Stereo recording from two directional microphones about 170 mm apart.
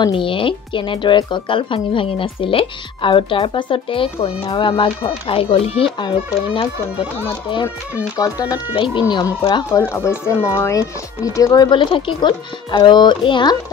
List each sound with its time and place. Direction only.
0.0 s speech: 30° left (ahead or behind)